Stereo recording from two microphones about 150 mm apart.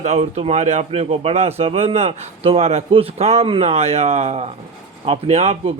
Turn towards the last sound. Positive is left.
turn(degrees=-45)  # may be behind; listen again after turning